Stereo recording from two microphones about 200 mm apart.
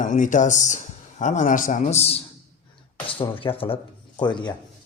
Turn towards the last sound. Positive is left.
turn(degrees=20)  # may be behind; listen again after turning